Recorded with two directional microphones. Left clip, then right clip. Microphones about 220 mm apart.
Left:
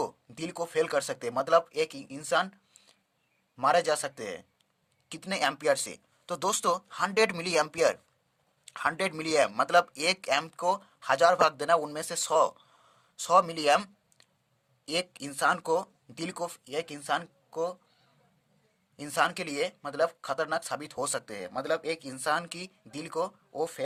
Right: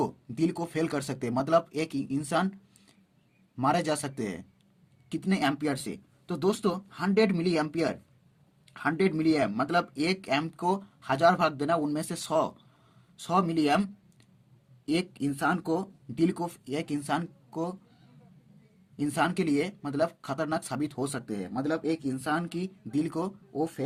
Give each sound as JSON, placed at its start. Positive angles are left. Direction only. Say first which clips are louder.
{"t": 0.0, "sound": "speech", "louder": "right 5 dB", "side_deg": 20}
{"t": 18.9, "sound": "speech", "louder": "even", "side_deg": 25}
{"t": 23.6, "sound": "speech", "louder": "right 1 dB", "side_deg": 35}